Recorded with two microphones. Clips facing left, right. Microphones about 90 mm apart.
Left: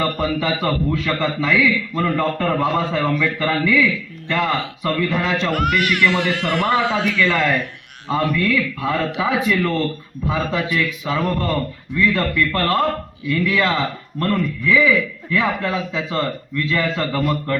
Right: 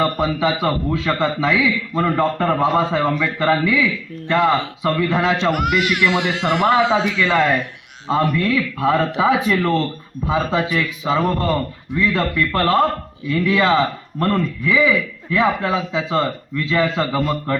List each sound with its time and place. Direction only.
0.0 s a man's voice: 20° right (ahead or behind)